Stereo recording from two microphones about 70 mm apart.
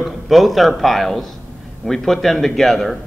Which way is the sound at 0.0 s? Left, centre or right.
Centre.